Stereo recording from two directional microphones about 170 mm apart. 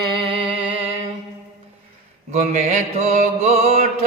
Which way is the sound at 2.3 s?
40° right (ahead or behind).